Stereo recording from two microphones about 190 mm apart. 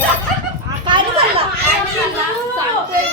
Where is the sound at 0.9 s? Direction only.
25° right (ahead or behind).